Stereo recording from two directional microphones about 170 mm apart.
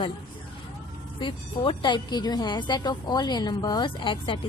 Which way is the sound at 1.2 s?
30° left (ahead or behind).